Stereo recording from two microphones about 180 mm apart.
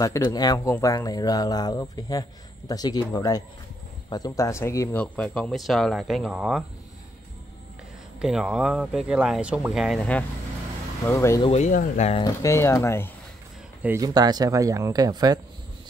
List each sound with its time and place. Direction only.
0.0 s speech: 20° left (ahead or behind); by 6.6 s centre (ahead or behind)
8.2 s speech: 5° right (ahead or behind)
11.1 s speech: 15° left (ahead or behind)
11.4 s speech: 40° left (ahead or behind)
12.4 s speech: 15° left (ahead or behind)
13.8 s speech: 20° right (ahead or behind)